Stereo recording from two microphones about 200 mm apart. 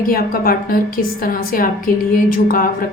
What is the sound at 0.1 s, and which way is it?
A woman's voice, 45° left (ahead or behind).